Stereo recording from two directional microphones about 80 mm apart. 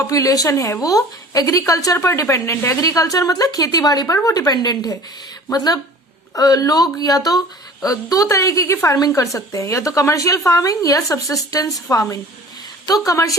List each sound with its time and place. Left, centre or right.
0.1 s a woman's voice: left
2.8 s a woman's voice: left